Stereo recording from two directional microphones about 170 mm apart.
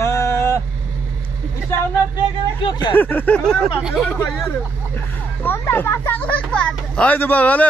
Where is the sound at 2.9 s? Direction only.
10° left (ahead or behind).